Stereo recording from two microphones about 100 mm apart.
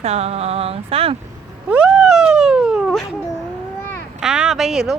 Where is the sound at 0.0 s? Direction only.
90° right.